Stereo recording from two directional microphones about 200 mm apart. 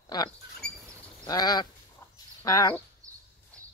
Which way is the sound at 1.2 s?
20° left (ahead or behind).